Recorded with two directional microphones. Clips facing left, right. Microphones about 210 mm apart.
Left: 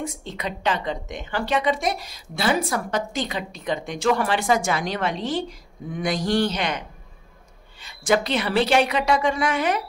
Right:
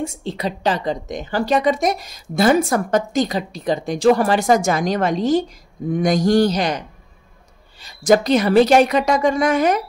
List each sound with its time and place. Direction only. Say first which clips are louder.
0.0 s a woman's voice: right 6 dB; 30° right (ahead or behind)
7.8 s a woman's voice: right 6 dB; 40° right (ahead or behind)